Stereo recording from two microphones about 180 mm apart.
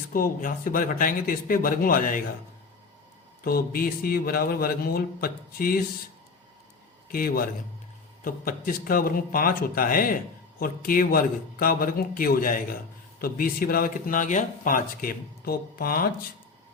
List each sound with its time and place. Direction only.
0.1 s speech: 50° left (ahead or behind)
3.4 s speech: 55° left (ahead or behind)
7.1 s speech: 55° left (ahead or behind)